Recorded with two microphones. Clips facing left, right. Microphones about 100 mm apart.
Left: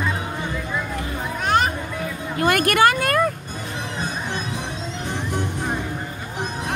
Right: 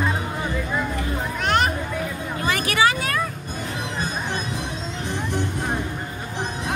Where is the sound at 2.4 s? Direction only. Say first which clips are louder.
Left 4 dB; 55° left (ahead or behind).